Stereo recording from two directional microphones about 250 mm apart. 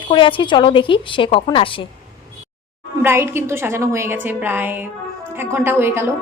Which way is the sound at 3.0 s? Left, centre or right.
Centre.